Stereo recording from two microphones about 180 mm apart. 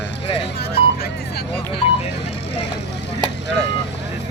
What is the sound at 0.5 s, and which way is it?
Vehicle, 60° left (ahead or behind).